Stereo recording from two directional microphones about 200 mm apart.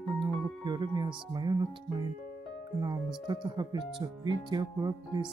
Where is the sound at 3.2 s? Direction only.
20° right (ahead or behind).